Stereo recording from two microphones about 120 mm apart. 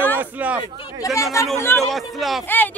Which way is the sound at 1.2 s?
25° left (ahead or behind).